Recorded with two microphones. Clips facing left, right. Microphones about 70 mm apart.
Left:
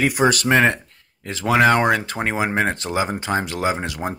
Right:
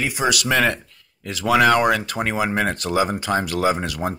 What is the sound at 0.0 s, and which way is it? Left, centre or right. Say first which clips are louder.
Speech: left 4 dB; left.